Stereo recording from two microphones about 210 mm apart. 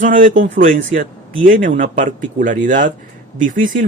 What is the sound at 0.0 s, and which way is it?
Speech, 40° right (ahead or behind).